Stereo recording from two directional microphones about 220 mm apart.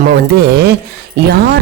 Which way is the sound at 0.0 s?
45° right (ahead or behind).